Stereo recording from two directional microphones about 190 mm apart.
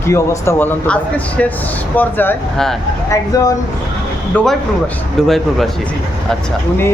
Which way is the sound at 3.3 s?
20° left (ahead or behind).